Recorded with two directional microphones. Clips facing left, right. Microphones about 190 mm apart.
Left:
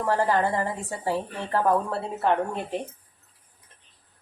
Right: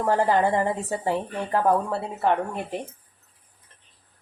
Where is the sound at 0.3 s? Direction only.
20° right (ahead or behind).